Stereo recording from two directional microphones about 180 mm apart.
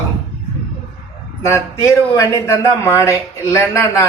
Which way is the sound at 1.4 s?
15° left (ahead or behind).